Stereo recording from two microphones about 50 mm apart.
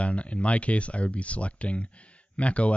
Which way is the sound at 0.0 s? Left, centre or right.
Left.